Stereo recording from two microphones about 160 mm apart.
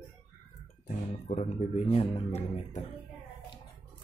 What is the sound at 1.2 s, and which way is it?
A man's voice, 45° left (ahead or behind).